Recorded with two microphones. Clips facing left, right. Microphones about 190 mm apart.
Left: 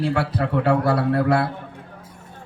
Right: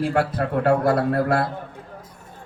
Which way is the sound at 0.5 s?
50° right (ahead or behind).